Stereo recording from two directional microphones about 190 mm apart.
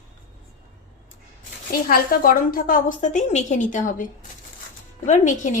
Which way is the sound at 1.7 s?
50° left (ahead or behind).